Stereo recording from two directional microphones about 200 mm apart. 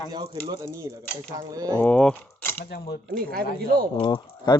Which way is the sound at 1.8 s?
5° left (ahead or behind).